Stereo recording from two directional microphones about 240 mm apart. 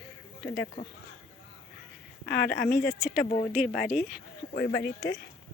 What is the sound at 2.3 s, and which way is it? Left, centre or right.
Speech, left.